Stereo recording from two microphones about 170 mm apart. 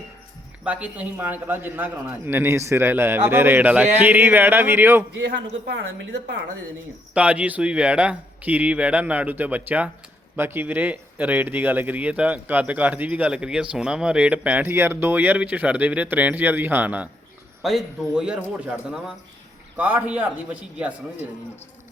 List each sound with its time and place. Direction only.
0.6 s speech: 5° right (ahead or behind)
5.2 s a woman's voice: 90° right
7.1 s speech: 5° right (ahead or behind)